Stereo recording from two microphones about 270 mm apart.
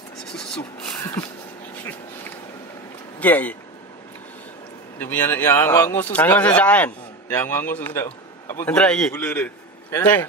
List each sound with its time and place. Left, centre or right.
0.3 s speech: centre
3.2 s speech: centre
4.9 s a man's voice: centre